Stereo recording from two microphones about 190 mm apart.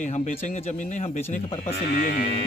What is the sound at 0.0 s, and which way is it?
A man's voice, 40° left (ahead or behind).